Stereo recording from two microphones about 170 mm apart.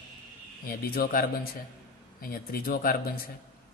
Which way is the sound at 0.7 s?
60° left (ahead or behind).